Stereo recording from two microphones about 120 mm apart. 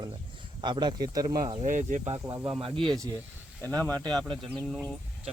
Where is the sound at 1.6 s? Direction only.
90° right.